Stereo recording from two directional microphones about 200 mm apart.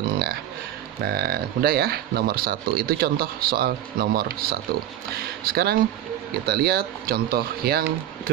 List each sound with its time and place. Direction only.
1.0 s speech: 50° right (ahead or behind)